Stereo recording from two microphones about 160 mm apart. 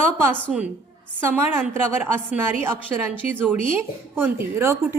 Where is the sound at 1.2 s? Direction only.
15° right (ahead or behind).